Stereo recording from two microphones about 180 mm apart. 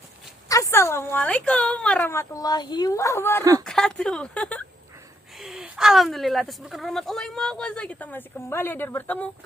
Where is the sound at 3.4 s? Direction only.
20° right (ahead or behind).